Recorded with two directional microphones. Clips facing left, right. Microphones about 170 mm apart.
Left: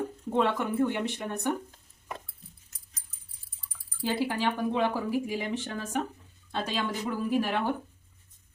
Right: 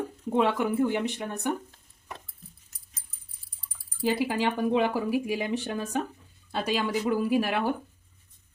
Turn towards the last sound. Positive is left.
turn(degrees=-10)  # may be behind; listen again after turning